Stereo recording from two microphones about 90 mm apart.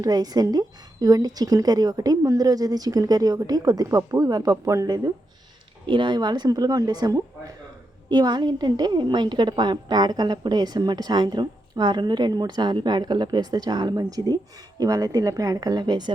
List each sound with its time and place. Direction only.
0.0 s a woman's voice: 45° right (ahead or behind)
4.9 s a woman's voice: 45° right (ahead or behind)
5.8 s a woman's voice: 65° right (ahead or behind)